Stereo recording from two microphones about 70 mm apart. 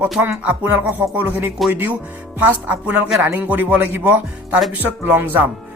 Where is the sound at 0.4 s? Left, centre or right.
Right.